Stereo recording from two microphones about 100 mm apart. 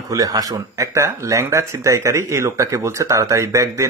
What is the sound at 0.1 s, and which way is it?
Speech, 35° right (ahead or behind).